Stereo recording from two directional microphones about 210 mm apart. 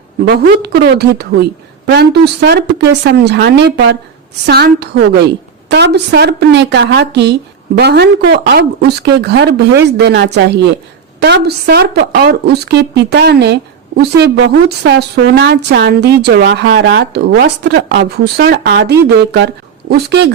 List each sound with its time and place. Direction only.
0.3 s a woman's voice: 50° right (ahead or behind)